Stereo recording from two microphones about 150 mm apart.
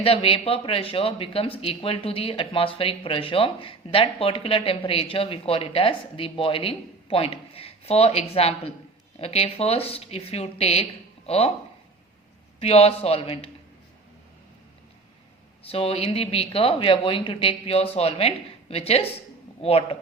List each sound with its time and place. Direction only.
0.0 s speech: 40° left (ahead or behind)
12.5 s speech: 45° left (ahead or behind)
15.6 s speech: 40° left (ahead or behind)